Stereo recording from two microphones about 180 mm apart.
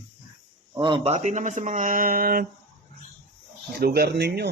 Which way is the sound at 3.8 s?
60° right (ahead or behind).